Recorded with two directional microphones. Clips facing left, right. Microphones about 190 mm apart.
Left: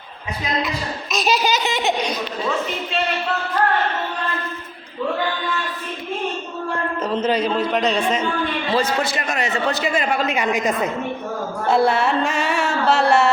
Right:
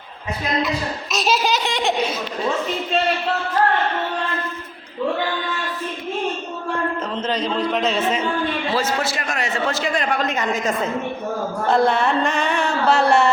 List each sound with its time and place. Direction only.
1.1 s a man's voice: centre (ahead or behind)
7.1 s a man's voice: 10° left (ahead or behind)